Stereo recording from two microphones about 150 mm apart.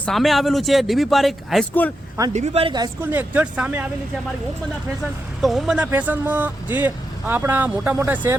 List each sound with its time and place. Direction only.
0.0 s speech: centre (ahead or behind)
2.3 s speech: 45° right (ahead or behind)
3.0 s speech: 10° right (ahead or behind)
5.4 s speech: centre (ahead or behind)